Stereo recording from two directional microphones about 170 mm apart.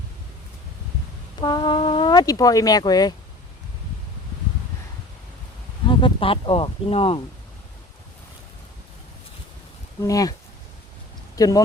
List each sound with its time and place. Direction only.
1.4 s speech: 25° left (ahead or behind)
5.8 s speech: 30° left (ahead or behind)
10.0 s speech: 20° left (ahead or behind)
11.3 s speech: 20° left (ahead or behind)